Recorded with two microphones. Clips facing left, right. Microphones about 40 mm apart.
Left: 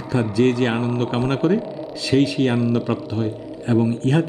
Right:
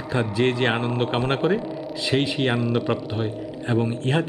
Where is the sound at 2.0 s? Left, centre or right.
Right.